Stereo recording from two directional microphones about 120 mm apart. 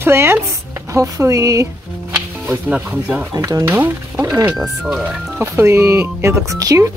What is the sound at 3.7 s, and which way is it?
Speech, 15° right (ahead or behind).